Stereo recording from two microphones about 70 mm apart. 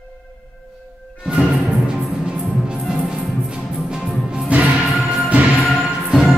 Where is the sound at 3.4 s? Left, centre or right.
Centre.